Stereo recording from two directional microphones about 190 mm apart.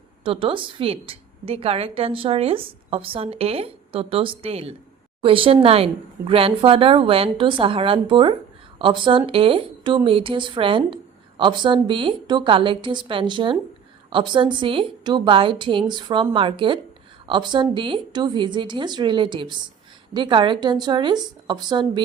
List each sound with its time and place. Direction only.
0.3 s speech: 25° right (ahead or behind)